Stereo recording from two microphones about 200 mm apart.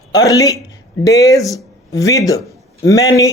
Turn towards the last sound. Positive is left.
turn(degrees=15)  # may be behind; listen again after turning